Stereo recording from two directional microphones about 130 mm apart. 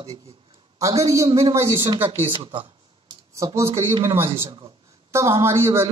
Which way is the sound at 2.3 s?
40° right (ahead or behind).